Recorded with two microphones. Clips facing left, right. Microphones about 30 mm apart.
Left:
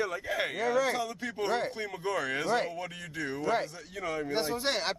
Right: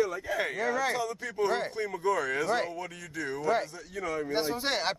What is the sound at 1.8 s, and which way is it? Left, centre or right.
Speech, centre.